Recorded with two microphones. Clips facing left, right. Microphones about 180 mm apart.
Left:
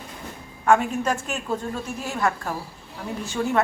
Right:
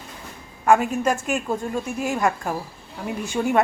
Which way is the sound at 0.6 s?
10° right (ahead or behind).